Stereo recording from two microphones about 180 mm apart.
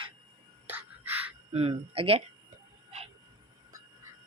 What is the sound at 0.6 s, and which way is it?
Music, 10° right (ahead or behind).